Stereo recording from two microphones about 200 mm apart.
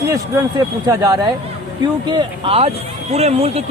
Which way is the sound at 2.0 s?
25° right (ahead or behind).